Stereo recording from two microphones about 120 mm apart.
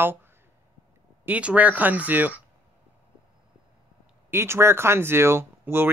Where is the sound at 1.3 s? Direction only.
10° right (ahead or behind).